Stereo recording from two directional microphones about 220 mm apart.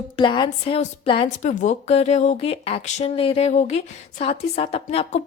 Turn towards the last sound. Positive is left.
turn(degrees=25)  # may be behind; listen again after turning